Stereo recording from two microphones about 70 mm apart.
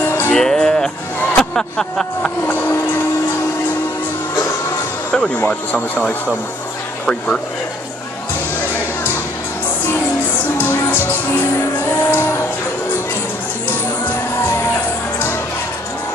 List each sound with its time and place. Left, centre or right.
0.3 s music: centre
1.3 s speech: centre
2.4 s music: left
5.1 s speech: centre
10.6 s speech: left